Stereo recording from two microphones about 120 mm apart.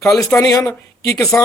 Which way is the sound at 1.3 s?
15° left (ahead or behind).